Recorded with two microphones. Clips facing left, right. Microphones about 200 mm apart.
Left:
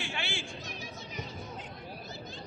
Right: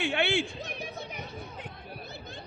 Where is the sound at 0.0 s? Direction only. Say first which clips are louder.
Right 11 dB; 60° right (ahead or behind).